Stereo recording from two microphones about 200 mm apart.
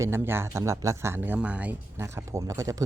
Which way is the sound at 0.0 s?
10° right (ahead or behind).